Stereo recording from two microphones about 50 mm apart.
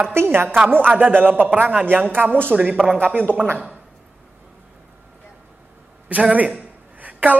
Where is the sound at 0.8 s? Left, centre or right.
Right.